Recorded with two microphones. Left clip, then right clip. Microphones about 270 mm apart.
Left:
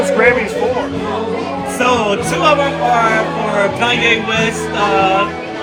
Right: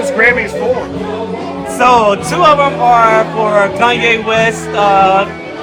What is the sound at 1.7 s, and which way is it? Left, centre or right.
Music, centre.